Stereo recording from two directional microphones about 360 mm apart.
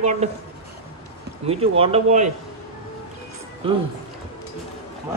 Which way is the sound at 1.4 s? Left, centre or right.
Centre.